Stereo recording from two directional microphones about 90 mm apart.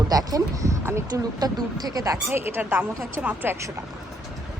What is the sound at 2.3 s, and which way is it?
Speech, 25° right (ahead or behind).